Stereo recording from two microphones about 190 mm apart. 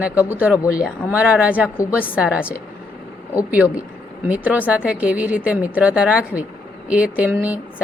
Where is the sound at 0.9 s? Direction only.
5° right (ahead or behind).